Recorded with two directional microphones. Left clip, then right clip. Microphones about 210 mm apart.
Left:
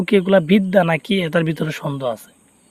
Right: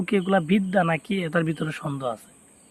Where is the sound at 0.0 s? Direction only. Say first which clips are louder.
Left 8 dB; 40° left (ahead or behind).